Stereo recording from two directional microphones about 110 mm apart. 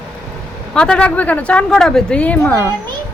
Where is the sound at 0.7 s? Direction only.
10° left (ahead or behind).